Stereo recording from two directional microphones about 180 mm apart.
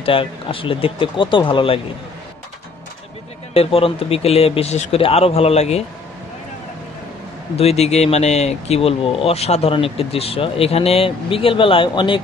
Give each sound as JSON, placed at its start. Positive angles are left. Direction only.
{"t": 0.0, "sound": "speech", "side_deg": 30}
{"t": 3.5, "sound": "speech", "side_deg": 30}
{"t": 7.5, "sound": "speech", "side_deg": 35}